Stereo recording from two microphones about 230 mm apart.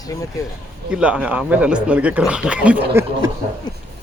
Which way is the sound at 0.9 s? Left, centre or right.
Centre.